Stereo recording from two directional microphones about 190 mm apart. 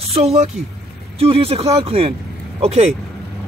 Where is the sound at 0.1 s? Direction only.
35° right (ahead or behind).